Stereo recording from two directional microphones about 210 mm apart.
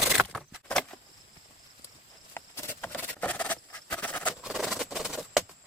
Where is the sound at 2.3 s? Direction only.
10° left (ahead or behind).